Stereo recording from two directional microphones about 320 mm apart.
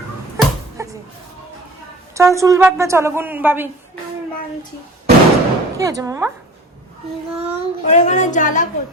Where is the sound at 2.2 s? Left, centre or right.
Centre.